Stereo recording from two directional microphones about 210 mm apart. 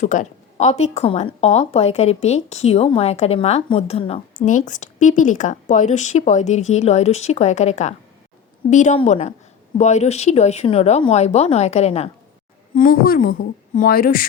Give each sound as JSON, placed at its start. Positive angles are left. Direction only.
{"t": 0.0, "sound": "a woman's voice", "side_deg": 35}
{"t": 12.7, "sound": "speech", "side_deg": 40}